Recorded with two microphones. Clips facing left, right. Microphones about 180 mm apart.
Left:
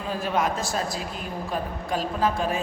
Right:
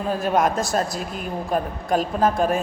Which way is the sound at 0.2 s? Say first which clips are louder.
Right 4 dB; 45° right (ahead or behind).